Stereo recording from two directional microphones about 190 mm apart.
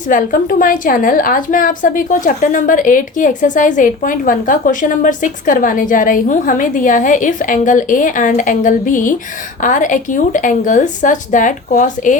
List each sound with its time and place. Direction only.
0.1 s a woman's voice: 45° left (ahead or behind)